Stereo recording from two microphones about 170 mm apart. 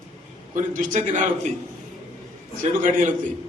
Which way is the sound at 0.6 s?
50° right (ahead or behind).